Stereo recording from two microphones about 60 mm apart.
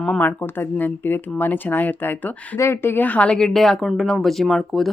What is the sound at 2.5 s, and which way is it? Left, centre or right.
Speech, left.